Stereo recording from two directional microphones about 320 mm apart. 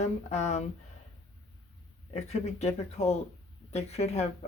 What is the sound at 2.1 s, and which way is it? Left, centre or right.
Speech, centre.